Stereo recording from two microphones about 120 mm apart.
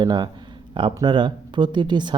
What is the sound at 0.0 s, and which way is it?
Speech, 40° right (ahead or behind).